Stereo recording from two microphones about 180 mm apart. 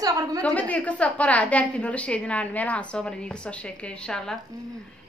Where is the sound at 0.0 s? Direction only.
20° right (ahead or behind).